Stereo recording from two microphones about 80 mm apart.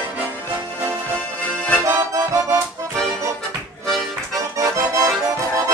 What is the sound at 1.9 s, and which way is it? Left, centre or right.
Accordion, right.